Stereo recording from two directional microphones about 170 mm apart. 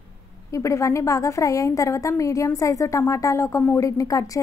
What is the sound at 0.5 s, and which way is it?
A woman's voice, 20° left (ahead or behind).